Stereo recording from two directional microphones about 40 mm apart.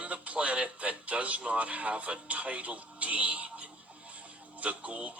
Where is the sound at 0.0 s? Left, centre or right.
Right.